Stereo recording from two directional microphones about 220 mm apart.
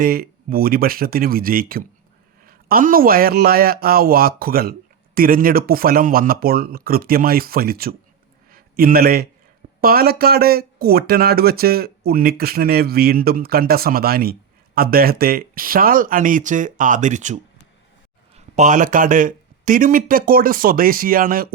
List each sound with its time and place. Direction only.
0.0 s speech: 40° right (ahead or behind)
8.4 s a sound: 40° right (ahead or behind)
9.8 s speech: 45° right (ahead or behind)
18.3 s speech: 35° right (ahead or behind)